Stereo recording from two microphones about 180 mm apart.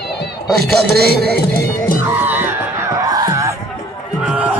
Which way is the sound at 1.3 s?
55° left (ahead or behind).